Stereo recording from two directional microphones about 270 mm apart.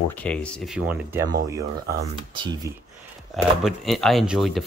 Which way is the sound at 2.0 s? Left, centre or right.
Centre.